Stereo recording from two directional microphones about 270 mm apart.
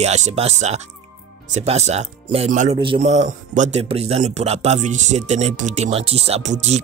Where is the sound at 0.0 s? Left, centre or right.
Right.